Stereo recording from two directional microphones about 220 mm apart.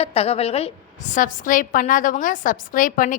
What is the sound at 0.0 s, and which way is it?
A woman's voice, 25° left (ahead or behind).